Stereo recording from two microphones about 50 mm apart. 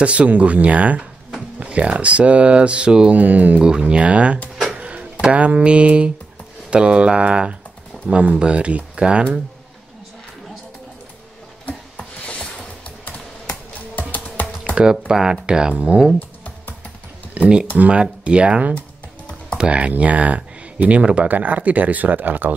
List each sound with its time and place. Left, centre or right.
0.0 s speech: right
3.1 s speech: right
4.7 s a sound: right
5.3 s speech: right
11.6 s a sound: left
13.0 s music: left
14.8 s speech: centre
15.7 s speech: right
16.2 s typing: left
17.4 s speech: right